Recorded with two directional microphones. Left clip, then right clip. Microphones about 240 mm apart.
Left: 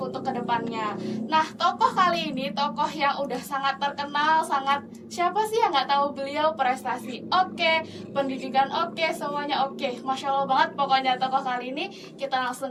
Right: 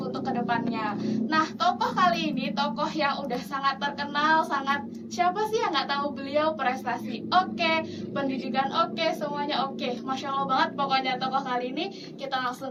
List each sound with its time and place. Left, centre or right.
0.1 s a woman's voice: left